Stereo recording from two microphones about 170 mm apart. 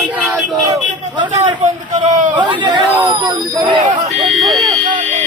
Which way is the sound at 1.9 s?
45° right (ahead or behind).